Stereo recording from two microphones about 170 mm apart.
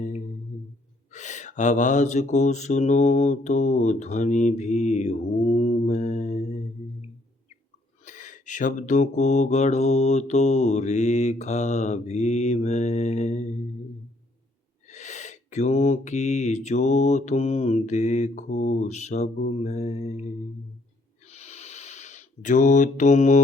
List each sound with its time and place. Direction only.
1.1 s mantra: 45° left (ahead or behind)
8.0 s mantra: 50° left (ahead or behind)
14.8 s mantra: 45° left (ahead or behind)
21.2 s a sound: 40° left (ahead or behind)